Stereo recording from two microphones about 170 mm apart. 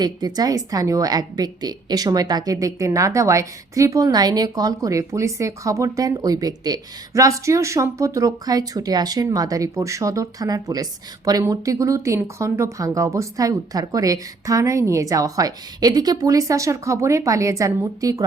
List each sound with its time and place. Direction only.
0.0 s a woman's voice: 25° right (ahead or behind)